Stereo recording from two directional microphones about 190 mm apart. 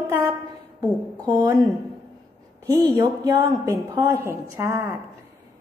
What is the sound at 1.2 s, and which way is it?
Speech, 15° right (ahead or behind).